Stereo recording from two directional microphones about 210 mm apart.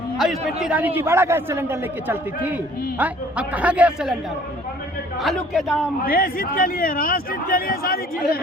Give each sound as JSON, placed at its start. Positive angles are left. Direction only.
{"t": 0.6, "sound": "a man's voice", "side_deg": -5}
{"t": 5.2, "sound": "a man's voice", "side_deg": 0}
{"t": 6.1, "sound": "speech", "side_deg": 45}